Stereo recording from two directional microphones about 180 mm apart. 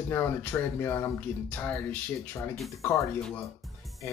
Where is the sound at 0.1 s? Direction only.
10° left (ahead or behind).